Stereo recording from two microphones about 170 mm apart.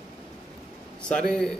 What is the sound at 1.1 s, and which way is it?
Speech, 5° left (ahead or behind).